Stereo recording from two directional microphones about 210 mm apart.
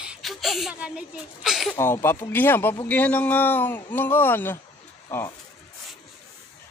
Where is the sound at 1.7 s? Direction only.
10° left (ahead or behind).